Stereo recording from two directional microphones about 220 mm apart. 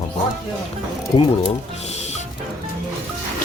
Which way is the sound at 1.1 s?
25° left (ahead or behind).